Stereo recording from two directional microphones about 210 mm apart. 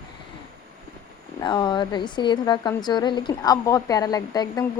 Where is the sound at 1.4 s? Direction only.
20° left (ahead or behind).